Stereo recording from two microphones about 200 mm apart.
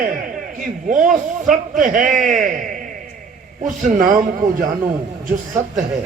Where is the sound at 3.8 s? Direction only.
40° right (ahead or behind).